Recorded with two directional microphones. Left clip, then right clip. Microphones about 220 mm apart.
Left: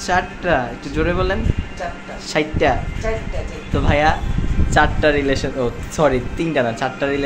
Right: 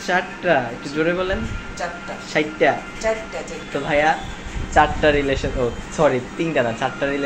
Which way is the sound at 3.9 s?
25° left (ahead or behind).